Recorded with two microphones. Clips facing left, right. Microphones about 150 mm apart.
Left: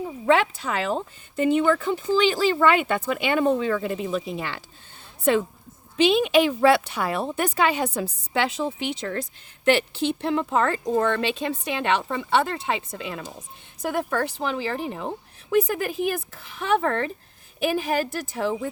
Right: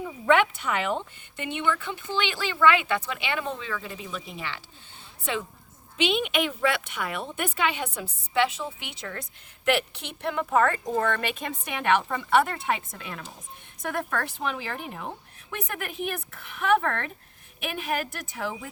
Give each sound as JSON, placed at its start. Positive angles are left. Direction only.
{"t": 0.0, "sound": "speech", "side_deg": 30}
{"t": 6.0, "sound": "a woman's voice", "side_deg": 35}